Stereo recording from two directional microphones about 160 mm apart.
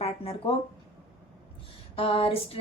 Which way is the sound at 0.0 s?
40° left (ahead or behind).